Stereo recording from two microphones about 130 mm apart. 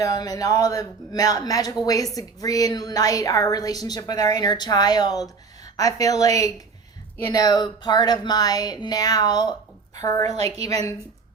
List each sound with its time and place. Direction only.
0.0 s a woman's voice: 30° left (ahead or behind)
10.2 s a woman's voice: 55° right (ahead or behind)